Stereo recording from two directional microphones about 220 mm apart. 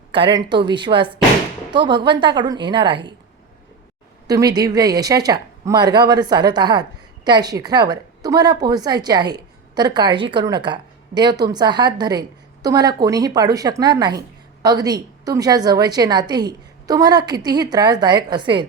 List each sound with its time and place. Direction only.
0.1 s a woman's voice: 20° right (ahead or behind)
4.3 s a woman's voice: 15° right (ahead or behind)